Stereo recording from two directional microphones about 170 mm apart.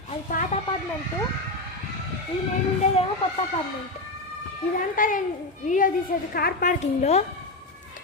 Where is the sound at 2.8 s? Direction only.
45° left (ahead or behind).